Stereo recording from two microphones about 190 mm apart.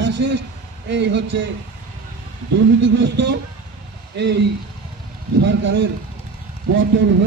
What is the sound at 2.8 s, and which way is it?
A man's voice, 70° right (ahead or behind).